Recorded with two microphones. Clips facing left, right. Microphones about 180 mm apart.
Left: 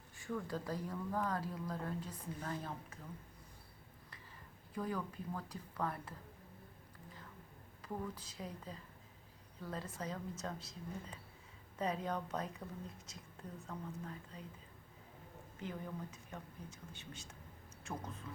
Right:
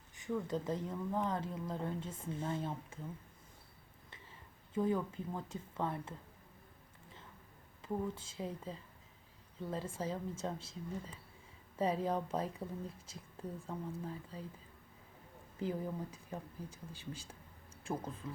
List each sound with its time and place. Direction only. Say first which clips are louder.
0.2 s speech: right 4 dB; 20° right (ahead or behind)
4.7 s speech: right 7 dB; 25° right (ahead or behind)
7.8 s speech: right 5 dB; 25° right (ahead or behind)
11.8 s speech: right 4 dB; 30° right (ahead or behind)
15.6 s a woman's voice: right 6 dB; 30° right (ahead or behind)